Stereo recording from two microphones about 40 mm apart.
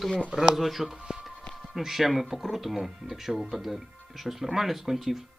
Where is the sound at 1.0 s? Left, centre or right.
Centre.